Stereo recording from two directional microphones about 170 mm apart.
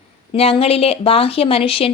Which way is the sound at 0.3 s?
35° left (ahead or behind).